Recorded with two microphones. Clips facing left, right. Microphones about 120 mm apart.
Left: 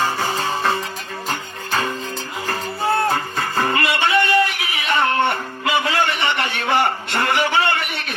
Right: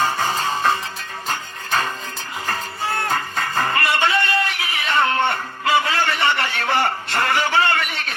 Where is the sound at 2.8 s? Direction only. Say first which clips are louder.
Left 5 dB; 30° left (ahead or behind).